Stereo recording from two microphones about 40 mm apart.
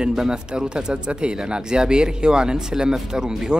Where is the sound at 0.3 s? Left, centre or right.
Right.